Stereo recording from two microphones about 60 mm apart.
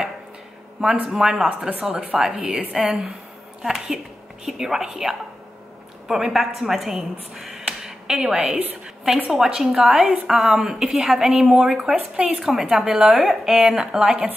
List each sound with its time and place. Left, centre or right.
0.7 s a woman's voice: centre
11.7 s a woman's voice: centre
12.4 s a woman's voice: centre